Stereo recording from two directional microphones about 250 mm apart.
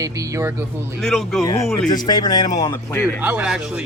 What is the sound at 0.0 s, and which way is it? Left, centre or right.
Speech, centre.